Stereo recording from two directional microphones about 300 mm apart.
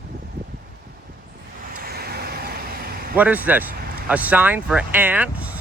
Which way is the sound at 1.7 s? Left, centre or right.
Right.